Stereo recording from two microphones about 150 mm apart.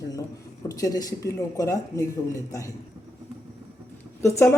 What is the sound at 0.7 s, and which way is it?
Speech, 25° left (ahead or behind).